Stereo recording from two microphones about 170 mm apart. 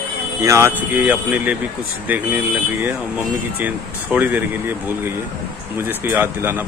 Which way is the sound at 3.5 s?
10° right (ahead or behind).